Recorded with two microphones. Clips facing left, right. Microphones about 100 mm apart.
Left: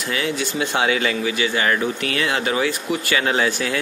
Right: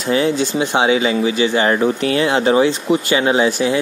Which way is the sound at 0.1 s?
30° right (ahead or behind).